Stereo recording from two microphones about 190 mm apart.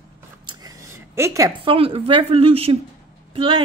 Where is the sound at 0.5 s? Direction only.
20° right (ahead or behind).